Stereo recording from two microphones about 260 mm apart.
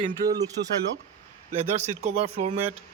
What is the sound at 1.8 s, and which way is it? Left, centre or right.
Speech, right.